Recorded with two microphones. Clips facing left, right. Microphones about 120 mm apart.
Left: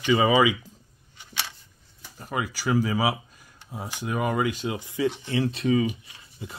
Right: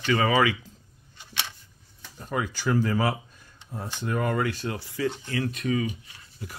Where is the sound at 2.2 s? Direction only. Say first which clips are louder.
Even; 5° left (ahead or behind).